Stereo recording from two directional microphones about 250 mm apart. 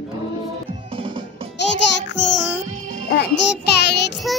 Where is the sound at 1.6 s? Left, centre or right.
Left.